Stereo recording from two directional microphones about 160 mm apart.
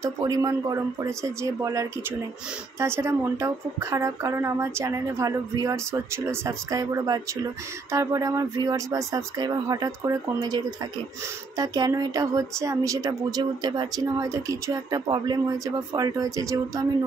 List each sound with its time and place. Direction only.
0.0 s speech: 20° right (ahead or behind)